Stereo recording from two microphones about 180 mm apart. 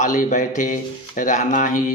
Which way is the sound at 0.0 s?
45° left (ahead or behind).